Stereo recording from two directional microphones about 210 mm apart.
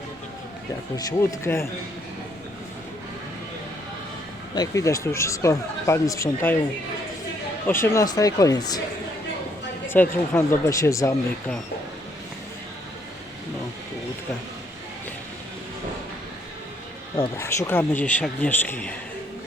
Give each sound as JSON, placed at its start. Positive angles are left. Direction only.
{"t": 0.9, "sound": "speech", "side_deg": 15}
{"t": 4.5, "sound": "speech", "side_deg": 15}
{"t": 7.7, "sound": "speech", "side_deg": 15}
{"t": 9.9, "sound": "speech", "side_deg": 10}
{"t": 17.2, "sound": "speech", "side_deg": 15}